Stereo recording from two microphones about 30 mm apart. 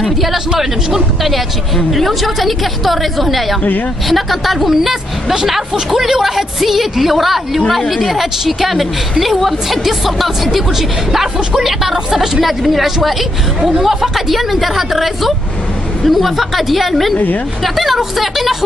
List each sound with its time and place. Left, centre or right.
0.0 s a woman's voice: centre
1.9 s a woman's voice: centre